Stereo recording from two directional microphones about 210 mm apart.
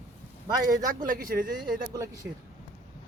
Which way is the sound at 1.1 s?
45° right (ahead or behind).